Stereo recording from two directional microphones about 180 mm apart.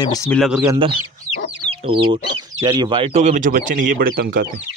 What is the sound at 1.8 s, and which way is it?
Speech, 30° right (ahead or behind).